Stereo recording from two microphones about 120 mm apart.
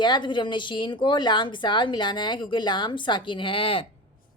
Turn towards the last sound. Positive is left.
turn(degrees=45)  # may be behind; listen again after turning